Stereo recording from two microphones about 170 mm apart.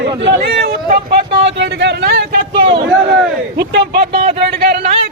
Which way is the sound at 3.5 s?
80° right.